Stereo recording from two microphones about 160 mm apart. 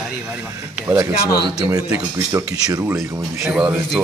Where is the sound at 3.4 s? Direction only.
5° right (ahead or behind).